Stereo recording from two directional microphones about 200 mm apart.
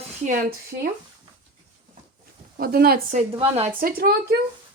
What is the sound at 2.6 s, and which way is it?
Speech, 50° right (ahead or behind).